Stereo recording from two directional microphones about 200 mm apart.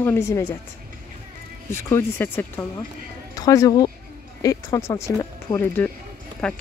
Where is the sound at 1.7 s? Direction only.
10° left (ahead or behind).